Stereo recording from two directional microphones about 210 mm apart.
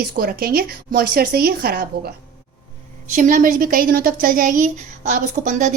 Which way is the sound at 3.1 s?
35° right (ahead or behind).